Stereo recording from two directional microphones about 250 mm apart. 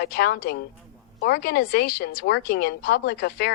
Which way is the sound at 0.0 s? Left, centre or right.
Left.